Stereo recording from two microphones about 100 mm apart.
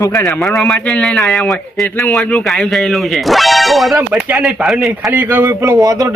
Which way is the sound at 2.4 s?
Centre (ahead or behind).